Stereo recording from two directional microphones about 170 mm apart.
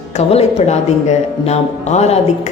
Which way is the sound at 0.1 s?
40° left (ahead or behind).